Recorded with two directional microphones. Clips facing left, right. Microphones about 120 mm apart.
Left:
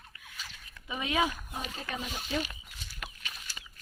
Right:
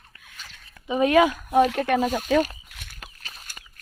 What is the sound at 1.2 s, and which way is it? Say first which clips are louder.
Speech: right 14 dB; 75° right (ahead or behind).